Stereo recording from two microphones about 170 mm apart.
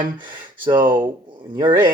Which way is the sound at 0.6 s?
30° right (ahead or behind).